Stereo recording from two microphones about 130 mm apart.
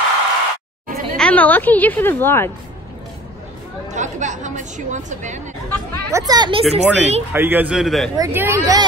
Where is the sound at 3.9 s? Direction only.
70° right (ahead or behind).